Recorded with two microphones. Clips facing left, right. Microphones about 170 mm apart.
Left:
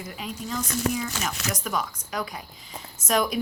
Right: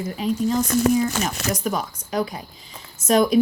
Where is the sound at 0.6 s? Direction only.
45° right (ahead or behind).